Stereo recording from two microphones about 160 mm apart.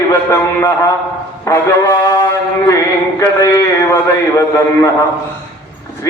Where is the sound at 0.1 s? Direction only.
15° left (ahead or behind).